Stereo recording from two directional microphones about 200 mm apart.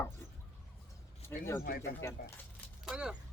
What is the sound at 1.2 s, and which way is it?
Speech, 10° left (ahead or behind).